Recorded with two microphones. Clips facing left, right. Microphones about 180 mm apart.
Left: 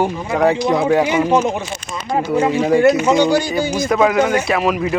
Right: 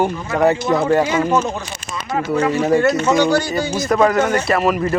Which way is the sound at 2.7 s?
15° left (ahead or behind).